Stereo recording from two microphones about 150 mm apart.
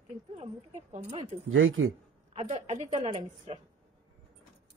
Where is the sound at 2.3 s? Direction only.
50° right (ahead or behind).